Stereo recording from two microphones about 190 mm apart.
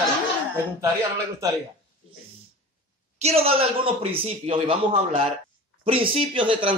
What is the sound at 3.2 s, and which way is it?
Speech, 35° right (ahead or behind).